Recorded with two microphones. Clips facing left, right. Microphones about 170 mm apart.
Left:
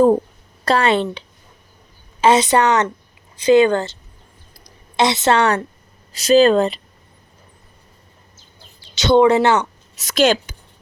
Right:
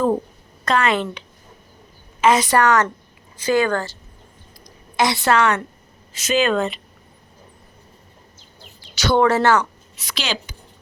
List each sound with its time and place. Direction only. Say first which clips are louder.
0.6 s speech: left 3 dB; 30° left (ahead or behind)
2.2 s a woman's voice: left 2 dB; 25° left (ahead or behind)
9.0 s a woman's voice: left 4 dB; 20° left (ahead or behind)
9.9 s a woman's voice: left 13 dB; 45° left (ahead or behind)